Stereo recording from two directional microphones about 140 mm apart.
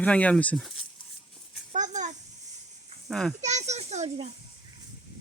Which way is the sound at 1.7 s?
60° right (ahead or behind).